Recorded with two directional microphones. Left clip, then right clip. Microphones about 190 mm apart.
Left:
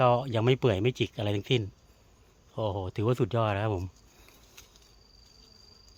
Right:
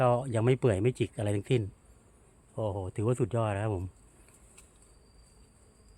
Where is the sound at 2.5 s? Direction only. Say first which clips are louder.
Left 2 dB; 20° left (ahead or behind).